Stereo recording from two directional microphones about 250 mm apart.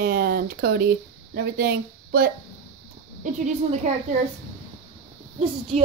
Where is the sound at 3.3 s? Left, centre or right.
Right.